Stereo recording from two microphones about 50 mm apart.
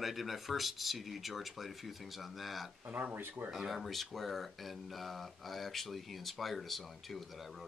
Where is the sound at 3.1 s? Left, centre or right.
Right.